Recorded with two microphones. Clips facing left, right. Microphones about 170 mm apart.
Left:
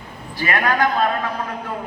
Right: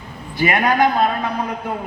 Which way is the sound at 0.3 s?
20° right (ahead or behind).